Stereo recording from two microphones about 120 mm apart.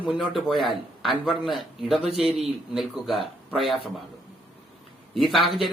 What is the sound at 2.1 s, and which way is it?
Speech, 55° right (ahead or behind).